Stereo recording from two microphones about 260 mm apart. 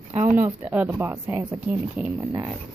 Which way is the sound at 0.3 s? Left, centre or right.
Centre.